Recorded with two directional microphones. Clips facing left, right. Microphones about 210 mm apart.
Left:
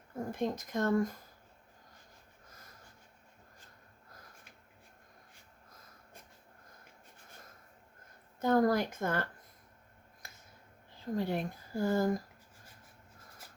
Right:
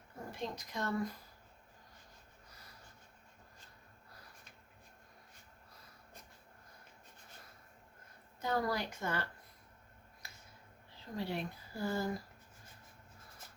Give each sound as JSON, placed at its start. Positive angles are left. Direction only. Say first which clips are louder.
{"t": 0.3, "sound": "speech", "louder": "left 7 dB", "side_deg": 50}
{"t": 8.4, "sound": "speech", "louder": "left 8 dB", "side_deg": 50}
{"t": 10.2, "sound": "a sound", "louder": "left 2 dB", "side_deg": 50}
{"t": 11.2, "sound": "speech", "louder": "left 3 dB", "side_deg": 50}